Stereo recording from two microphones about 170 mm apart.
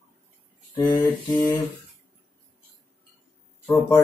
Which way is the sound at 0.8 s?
10° left (ahead or behind).